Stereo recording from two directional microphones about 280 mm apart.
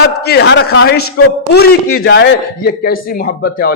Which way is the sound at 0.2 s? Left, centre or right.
Left.